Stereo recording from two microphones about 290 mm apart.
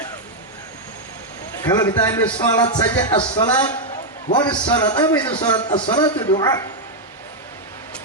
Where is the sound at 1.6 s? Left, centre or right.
Centre.